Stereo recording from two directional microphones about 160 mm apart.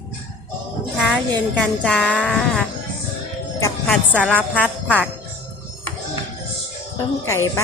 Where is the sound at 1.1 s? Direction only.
5° left (ahead or behind).